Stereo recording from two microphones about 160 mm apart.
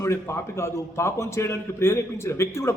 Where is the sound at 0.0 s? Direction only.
15° left (ahead or behind).